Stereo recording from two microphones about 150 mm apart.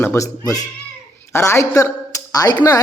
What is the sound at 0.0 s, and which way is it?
A woman's voice, 20° left (ahead or behind).